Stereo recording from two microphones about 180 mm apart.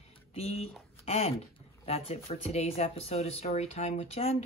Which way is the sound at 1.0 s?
35° left (ahead or behind).